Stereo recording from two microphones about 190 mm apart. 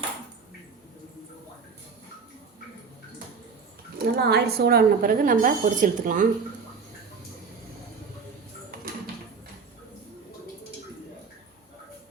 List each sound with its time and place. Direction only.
3.9 s a woman's voice: 55° right (ahead or behind)